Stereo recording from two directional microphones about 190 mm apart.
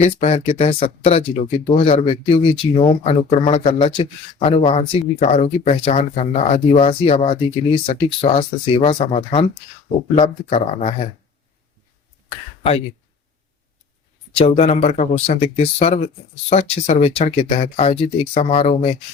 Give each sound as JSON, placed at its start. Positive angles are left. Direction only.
{"t": 0.0, "sound": "speech", "side_deg": 35}
{"t": 10.5, "sound": "speech", "side_deg": 35}
{"t": 14.3, "sound": "speech", "side_deg": 30}